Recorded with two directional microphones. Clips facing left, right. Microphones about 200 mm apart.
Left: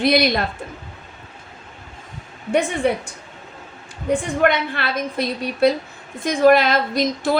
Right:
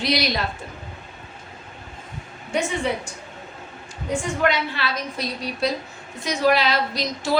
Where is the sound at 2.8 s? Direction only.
55° left (ahead or behind).